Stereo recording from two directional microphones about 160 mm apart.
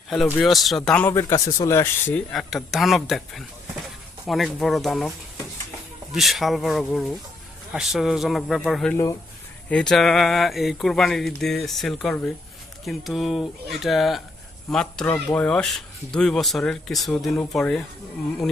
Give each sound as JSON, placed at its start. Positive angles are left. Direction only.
{"t": 0.3, "sound": "speech", "side_deg": 0}
{"t": 0.9, "sound": "speech", "side_deg": 10}
{"t": 2.3, "sound": "speech", "side_deg": 0}
{"t": 6.1, "sound": "speech", "side_deg": 0}